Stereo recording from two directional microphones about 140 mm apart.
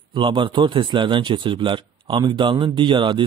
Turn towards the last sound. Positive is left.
turn(degrees=-35)  # may be behind; listen again after turning